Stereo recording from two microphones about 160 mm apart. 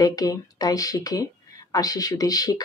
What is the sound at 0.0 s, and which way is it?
A woman's voice, 25° left (ahead or behind).